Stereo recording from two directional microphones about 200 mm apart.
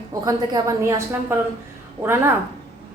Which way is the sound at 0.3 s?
20° right (ahead or behind).